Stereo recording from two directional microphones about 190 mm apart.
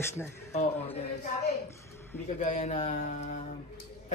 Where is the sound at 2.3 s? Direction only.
35° left (ahead or behind).